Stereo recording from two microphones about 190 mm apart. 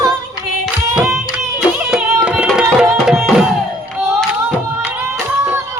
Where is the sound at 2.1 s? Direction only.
5° right (ahead or behind).